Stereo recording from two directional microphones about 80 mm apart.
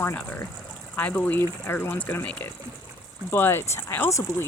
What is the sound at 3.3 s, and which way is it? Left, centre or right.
Speech, left.